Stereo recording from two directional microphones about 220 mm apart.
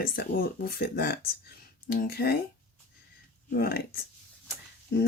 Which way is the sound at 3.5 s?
45° left (ahead or behind).